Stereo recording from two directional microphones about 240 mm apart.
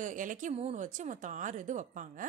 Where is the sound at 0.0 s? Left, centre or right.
Right.